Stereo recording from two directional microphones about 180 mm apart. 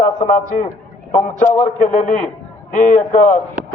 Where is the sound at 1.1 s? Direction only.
10° left (ahead or behind).